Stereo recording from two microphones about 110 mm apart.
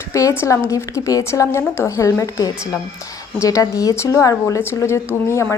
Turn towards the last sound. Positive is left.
turn(degrees=25)  # may be behind; listen again after turning